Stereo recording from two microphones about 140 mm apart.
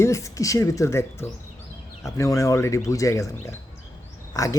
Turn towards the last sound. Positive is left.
turn(degrees=25)  # may be behind; listen again after turning